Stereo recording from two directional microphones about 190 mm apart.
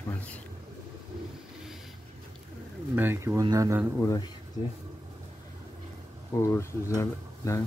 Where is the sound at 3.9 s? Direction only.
15° left (ahead or behind).